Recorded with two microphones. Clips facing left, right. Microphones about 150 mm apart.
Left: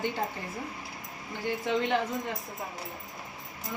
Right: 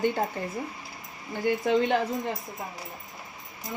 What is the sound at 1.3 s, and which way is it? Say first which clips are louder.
Speech: right 6 dB; 40° right (ahead or behind).